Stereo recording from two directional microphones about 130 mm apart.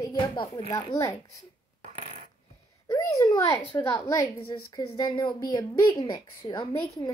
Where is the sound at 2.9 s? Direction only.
25° left (ahead or behind).